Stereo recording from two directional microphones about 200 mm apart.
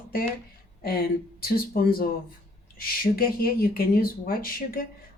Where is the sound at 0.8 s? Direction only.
50° left (ahead or behind).